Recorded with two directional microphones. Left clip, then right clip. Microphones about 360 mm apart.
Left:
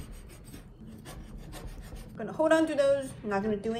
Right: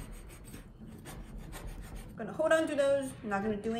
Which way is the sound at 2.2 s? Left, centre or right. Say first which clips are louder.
Left 3 dB; centre.